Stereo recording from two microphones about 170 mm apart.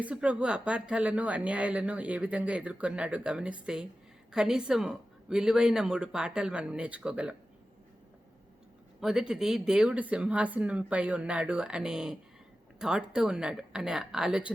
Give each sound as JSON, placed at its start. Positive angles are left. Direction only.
{"t": 0.0, "sound": "speech", "side_deg": -5}
{"t": 9.0, "sound": "speech", "side_deg": -5}